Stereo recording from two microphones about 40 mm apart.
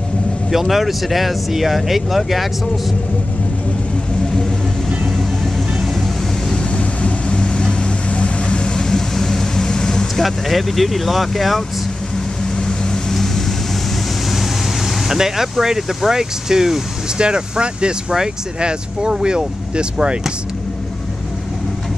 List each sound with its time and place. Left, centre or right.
0.5 s speech: centre
4.8 s vehicle: centre
6.5 s vehicle: left
8.7 s vehicle: centre
10.1 s speech: centre
12.5 s vehicle: centre
13.1 s vehicle: centre
14.3 s speech: centre
17.2 s speech: right